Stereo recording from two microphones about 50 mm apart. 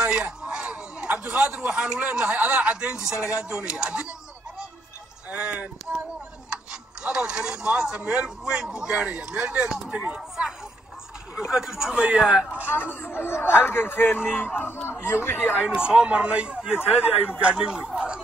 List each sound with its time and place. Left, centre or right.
0.0 s a sound: right
2.3 s speech: right
2.6 s speech: centre
5.3 s speech: right
6.5 s speech: centre
11.3 s speech: centre
12.7 s speech: left
14.9 s speech: left
15.6 s speech: centre